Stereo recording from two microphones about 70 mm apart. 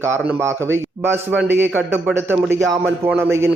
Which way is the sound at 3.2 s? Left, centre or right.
Right.